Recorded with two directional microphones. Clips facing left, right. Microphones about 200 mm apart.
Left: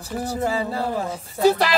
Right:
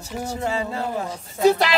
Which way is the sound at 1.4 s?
Centre (ahead or behind).